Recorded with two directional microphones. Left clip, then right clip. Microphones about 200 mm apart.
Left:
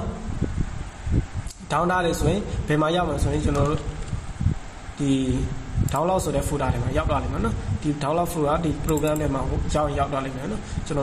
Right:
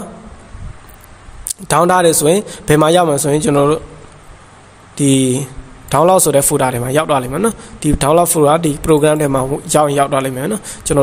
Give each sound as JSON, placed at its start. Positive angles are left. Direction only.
{"t": 1.7, "sound": "a man's voice", "side_deg": -55}
{"t": 5.0, "sound": "a man's voice", "side_deg": -60}